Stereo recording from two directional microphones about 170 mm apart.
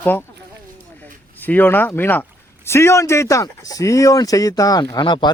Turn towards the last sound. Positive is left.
turn(degrees=25)  # may be behind; listen again after turning